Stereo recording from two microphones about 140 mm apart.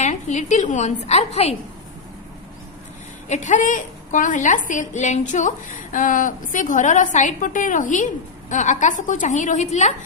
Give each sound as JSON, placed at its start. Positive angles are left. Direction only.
{"t": 0.0, "sound": "a woman's voice", "side_deg": 60}
{"t": 3.2, "sound": "a woman's voice", "side_deg": 60}